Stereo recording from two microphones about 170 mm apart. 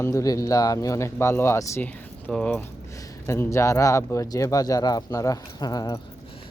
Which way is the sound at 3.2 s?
15° left (ahead or behind).